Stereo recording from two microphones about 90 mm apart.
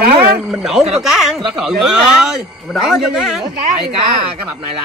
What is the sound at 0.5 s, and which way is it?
Speech, 5° right (ahead or behind).